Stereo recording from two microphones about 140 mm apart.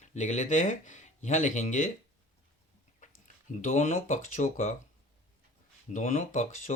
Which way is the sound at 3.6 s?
60° left (ahead or behind).